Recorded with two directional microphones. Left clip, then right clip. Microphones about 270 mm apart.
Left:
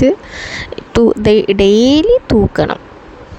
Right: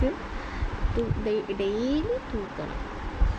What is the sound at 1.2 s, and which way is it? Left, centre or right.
Speech, left.